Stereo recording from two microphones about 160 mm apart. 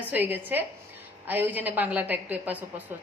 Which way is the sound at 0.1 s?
10° right (ahead or behind).